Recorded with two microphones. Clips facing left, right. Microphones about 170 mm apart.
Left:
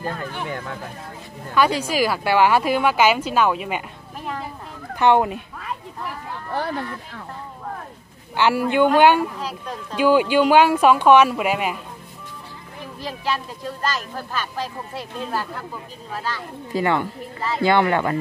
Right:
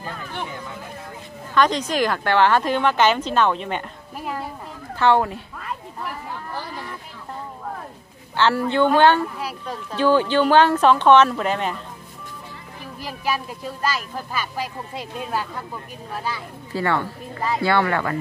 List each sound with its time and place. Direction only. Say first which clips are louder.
0.0 s speech: left 3 dB; 55° left (ahead or behind)
1.5 s speech: even; 10° left (ahead or behind)
4.2 s a sound: right 1 dB; 5° right (ahead or behind)
4.9 s speech: left 1 dB; 15° left (ahead or behind)
8.4 s speech: left 1 dB; 10° left (ahead or behind)
9.4 s speech: even; 10° right (ahead or behind)
9.9 s speech: left 1 dB; 10° left (ahead or behind)
13.0 s speech: even; 10° right (ahead or behind)
16.7 s speech: left 2 dB; 15° left (ahead or behind)